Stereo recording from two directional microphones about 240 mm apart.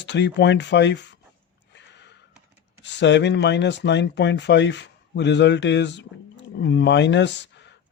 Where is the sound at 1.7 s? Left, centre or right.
Left.